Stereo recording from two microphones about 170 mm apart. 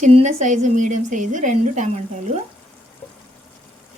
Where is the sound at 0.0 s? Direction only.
40° right (ahead or behind).